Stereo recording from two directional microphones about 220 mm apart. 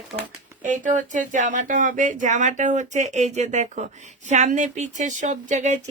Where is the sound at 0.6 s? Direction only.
35° right (ahead or behind).